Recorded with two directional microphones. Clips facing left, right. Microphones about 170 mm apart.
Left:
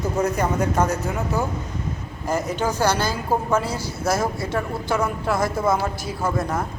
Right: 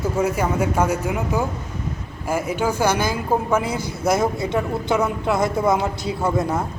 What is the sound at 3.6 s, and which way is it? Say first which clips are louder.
Speech: right 2 dB; 55° right (ahead or behind).